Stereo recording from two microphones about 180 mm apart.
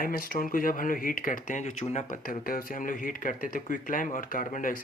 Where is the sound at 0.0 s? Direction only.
55° left (ahead or behind).